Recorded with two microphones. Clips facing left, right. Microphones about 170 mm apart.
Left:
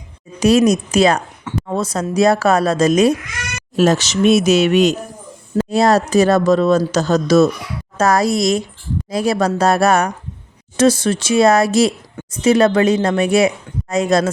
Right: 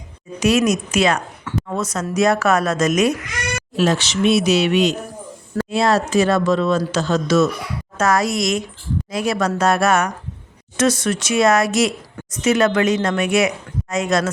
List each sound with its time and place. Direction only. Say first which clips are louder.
0.3 s speech: left 4 dB; 35° left (ahead or behind)
3.8 s speech: left 4 dB; 45° left (ahead or behind)